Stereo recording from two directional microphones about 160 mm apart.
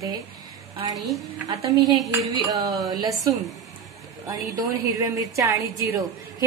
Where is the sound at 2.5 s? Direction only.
20° right (ahead or behind).